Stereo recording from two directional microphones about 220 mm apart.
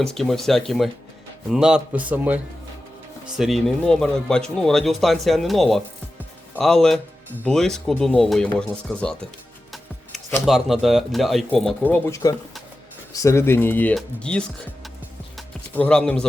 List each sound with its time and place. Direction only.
0.0 s a man's voice: centre (ahead or behind)
10.4 s speech: centre (ahead or behind)
15.4 s music: 5° left (ahead or behind)